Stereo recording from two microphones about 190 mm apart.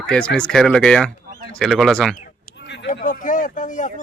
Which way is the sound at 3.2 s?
45° left (ahead or behind).